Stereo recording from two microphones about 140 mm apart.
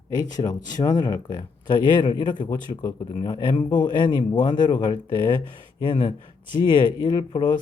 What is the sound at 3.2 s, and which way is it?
Speech, 30° left (ahead or behind).